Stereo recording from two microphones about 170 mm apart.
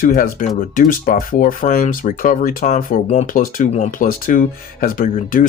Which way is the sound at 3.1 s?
40° left (ahead or behind).